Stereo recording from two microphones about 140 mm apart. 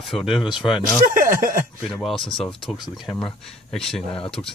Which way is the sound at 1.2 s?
75° right (ahead or behind).